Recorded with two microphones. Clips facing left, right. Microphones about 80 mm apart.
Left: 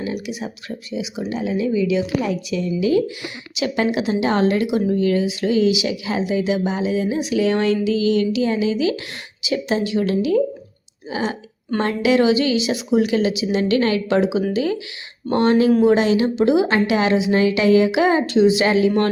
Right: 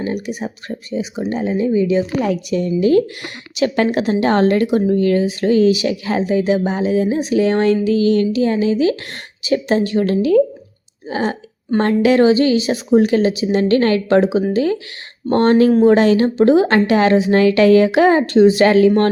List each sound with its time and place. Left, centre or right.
0.0 s a woman's voice: right
2.2 s a woman's voice: right
15.7 s a woman's voice: right
16.0 s speech: right